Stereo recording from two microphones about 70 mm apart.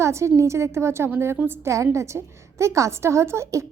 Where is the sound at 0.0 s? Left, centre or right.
Right.